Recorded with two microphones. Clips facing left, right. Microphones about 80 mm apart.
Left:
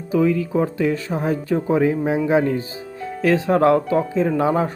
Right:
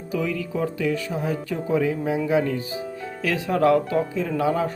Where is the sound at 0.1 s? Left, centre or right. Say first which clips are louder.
Left 8 dB; left.